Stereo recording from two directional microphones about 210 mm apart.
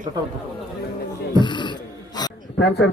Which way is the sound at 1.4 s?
20° left (ahead or behind).